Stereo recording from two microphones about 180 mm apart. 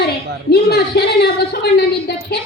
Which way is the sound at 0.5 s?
60° left (ahead or behind).